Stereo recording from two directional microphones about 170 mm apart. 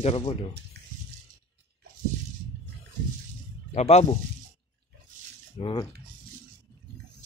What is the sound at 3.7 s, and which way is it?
Speech, 40° left (ahead or behind).